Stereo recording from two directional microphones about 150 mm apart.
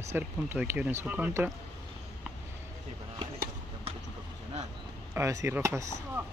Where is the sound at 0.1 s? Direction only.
15° right (ahead or behind).